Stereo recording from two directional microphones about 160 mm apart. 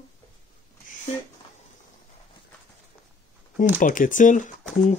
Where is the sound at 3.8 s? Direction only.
55° left (ahead or behind).